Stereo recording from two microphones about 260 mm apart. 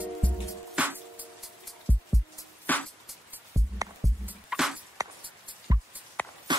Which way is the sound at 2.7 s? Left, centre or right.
Centre.